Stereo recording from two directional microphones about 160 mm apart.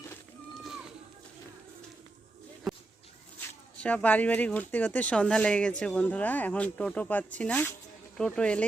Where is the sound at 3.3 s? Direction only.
10° left (ahead or behind).